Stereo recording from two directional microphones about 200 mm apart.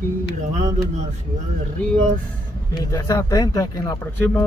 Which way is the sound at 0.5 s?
35° right (ahead or behind).